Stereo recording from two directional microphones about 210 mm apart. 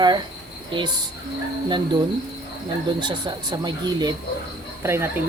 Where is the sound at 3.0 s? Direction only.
20° right (ahead or behind).